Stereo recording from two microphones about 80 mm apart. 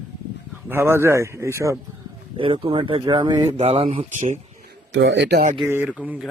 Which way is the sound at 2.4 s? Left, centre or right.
Right.